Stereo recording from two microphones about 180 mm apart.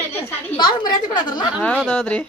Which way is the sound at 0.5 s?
25° left (ahead or behind).